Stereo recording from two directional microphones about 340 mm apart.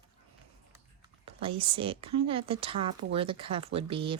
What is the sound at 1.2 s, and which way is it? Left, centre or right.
Speech, centre.